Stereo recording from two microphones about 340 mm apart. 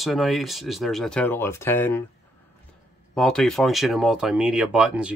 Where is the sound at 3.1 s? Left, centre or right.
Centre.